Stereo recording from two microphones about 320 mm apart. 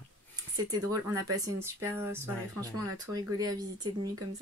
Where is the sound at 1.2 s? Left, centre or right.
Right.